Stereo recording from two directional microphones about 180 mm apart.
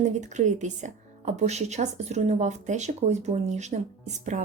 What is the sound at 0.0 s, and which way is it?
A woman's voice, 40° right (ahead or behind).